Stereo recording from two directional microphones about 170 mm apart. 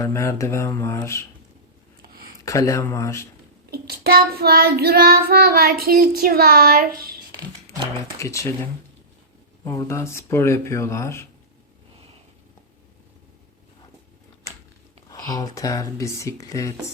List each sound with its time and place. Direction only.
0.0 s speech: 15° left (ahead or behind)
2.0 s a sound: 60° right (ahead or behind)
2.4 s speech: 20° left (ahead or behind)
3.7 s child singing: 65° right (ahead or behind)
8.2 s speech: 20° left (ahead or behind)
9.6 s speech: 15° left (ahead or behind)
15.1 s speech: 20° left (ahead or behind)